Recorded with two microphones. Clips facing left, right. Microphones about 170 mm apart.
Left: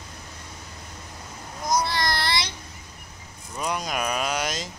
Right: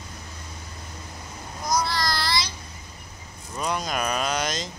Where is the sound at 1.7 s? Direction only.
25° left (ahead or behind).